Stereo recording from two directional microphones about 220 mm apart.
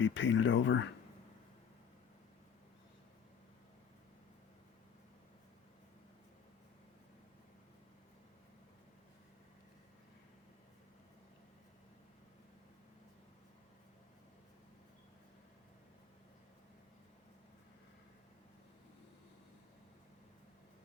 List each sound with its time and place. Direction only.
0.0 s speech: 55° left (ahead or behind)